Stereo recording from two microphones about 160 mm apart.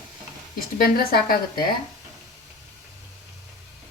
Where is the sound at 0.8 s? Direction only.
65° left (ahead or behind).